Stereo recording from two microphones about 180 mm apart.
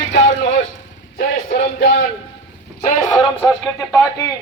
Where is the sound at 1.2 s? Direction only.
50° left (ahead or behind).